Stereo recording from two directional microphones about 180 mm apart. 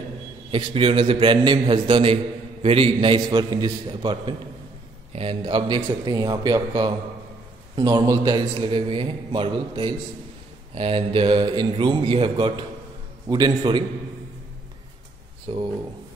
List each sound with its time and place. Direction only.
0.5 s a man's voice: 30° right (ahead or behind)
15.5 s a man's voice: 30° right (ahead or behind)